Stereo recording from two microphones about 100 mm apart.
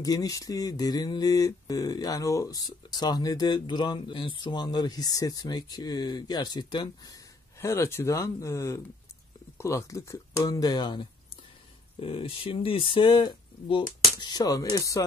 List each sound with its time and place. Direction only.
0.0 s speech: 35° left (ahead or behind)
7.6 s speech: 25° left (ahead or behind); by 11.1 s 50° left (ahead or behind)
12.0 s speech: 65° left (ahead or behind)
14.3 s speech: 40° left (ahead or behind)